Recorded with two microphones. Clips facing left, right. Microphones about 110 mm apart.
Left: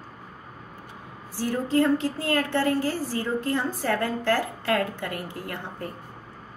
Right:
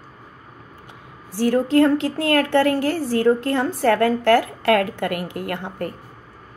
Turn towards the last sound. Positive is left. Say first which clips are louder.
# right 7 dB
turn(degrees=-70)  # may be behind; listen again after turning